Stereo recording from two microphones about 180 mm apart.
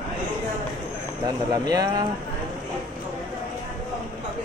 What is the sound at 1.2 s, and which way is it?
Speech, 20° right (ahead or behind).